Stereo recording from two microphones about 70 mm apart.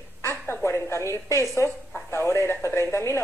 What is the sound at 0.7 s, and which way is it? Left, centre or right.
A woman's voice, left.